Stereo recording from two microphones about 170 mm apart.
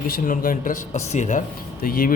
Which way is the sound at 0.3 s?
50° left (ahead or behind).